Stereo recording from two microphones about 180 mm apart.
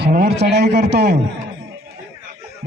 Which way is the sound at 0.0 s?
60° right (ahead or behind).